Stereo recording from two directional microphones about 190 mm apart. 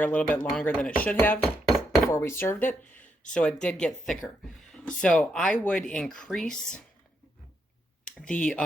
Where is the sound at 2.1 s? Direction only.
15° left (ahead or behind).